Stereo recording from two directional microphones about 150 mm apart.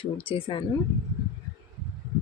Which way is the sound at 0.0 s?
35° left (ahead or behind).